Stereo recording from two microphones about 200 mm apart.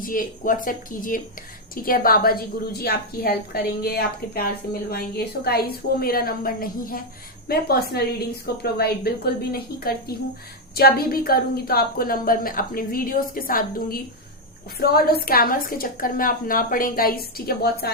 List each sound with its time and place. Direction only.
0.0 s a woman's voice: 45° left (ahead or behind)